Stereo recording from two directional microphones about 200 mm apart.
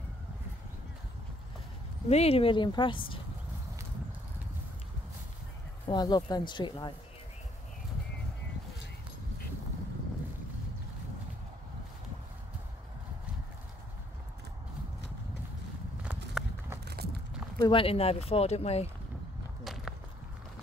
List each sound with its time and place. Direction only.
2.0 s speech: 30° left (ahead or behind)
5.9 s speech: 20° left (ahead or behind)
16.0 s horse: 5° right (ahead or behind)
16.8 s a sound: 50° right (ahead or behind)
17.6 s speech: 25° left (ahead or behind)
19.6 s walk: centre (ahead or behind)